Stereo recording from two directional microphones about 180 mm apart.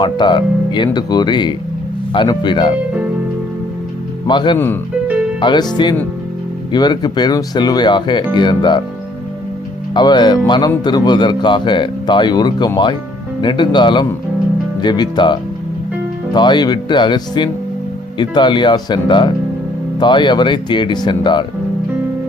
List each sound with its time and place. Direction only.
0.0 s a man's voice: 25° left (ahead or behind)
4.3 s a man's voice: 25° left (ahead or behind)
4.5 s speech: 10° left (ahead or behind)
5.4 s a man's voice: 25° left (ahead or behind)
9.9 s a man's voice: 25° left (ahead or behind)